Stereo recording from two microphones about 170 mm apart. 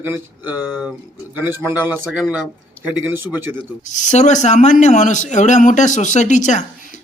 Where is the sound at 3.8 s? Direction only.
45° left (ahead or behind).